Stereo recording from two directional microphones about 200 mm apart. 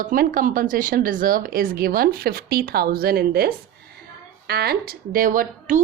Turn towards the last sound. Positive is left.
turn(degrees=-40)  # may be behind; listen again after turning